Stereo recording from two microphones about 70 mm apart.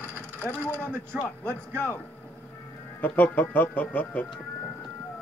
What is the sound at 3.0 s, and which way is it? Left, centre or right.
Speech, left.